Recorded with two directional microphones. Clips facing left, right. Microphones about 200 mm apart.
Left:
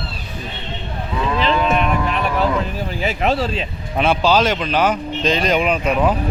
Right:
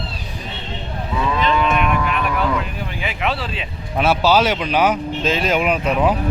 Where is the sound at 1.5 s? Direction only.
35° left (ahead or behind).